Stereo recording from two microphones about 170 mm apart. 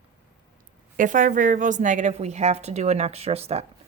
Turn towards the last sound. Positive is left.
turn(degrees=-40)  # may be behind; listen again after turning